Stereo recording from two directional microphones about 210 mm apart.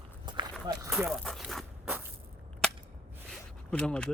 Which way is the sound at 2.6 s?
5° left (ahead or behind).